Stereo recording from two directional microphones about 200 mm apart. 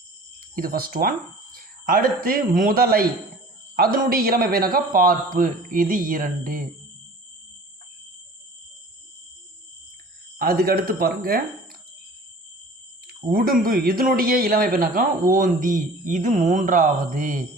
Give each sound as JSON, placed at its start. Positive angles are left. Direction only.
{"t": 0.3, "sound": "speech", "side_deg": -45}
{"t": 1.5, "sound": "a sound", "side_deg": -45}
{"t": 2.6, "sound": "speech", "side_deg": -45}
{"t": 10.3, "sound": "speech", "side_deg": -50}
{"t": 13.1, "sound": "speech", "side_deg": -45}